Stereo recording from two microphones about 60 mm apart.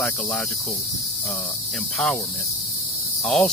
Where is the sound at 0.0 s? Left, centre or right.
Centre.